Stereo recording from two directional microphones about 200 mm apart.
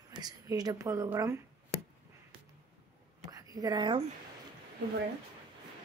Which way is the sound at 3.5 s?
20° right (ahead or behind).